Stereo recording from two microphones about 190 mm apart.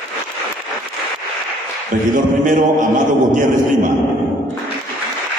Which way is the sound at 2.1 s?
45° right (ahead or behind).